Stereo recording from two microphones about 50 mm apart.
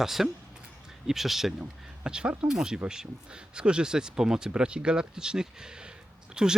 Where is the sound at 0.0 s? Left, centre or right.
Centre.